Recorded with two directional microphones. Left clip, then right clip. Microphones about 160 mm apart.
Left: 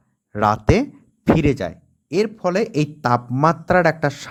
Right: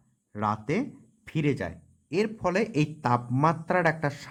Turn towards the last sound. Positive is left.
turn(degrees=40)  # may be behind; listen again after turning